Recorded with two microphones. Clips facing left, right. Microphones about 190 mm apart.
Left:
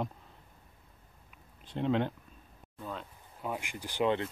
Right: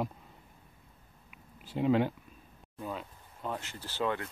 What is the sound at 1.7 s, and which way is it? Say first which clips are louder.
Speech: right 3 dB; 5° right (ahead or behind).